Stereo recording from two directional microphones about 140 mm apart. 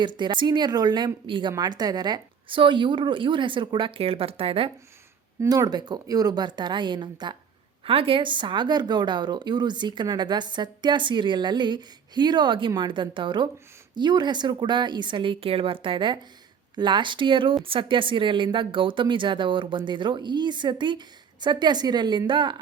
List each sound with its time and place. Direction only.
0.0 s a woman's voice: 35° right (ahead or behind)
5.4 s a woman's voice: 25° right (ahead or behind)